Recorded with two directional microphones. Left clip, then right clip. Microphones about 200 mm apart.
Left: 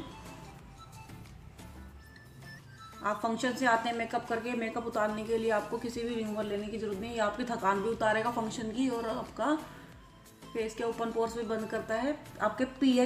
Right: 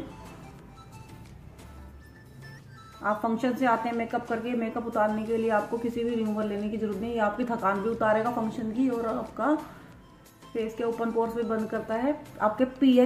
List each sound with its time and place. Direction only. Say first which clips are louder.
3.0 s a woman's voice: right 4 dB; 10° left (ahead or behind)
10.5 s a woman's voice: right 4 dB; 15° left (ahead or behind)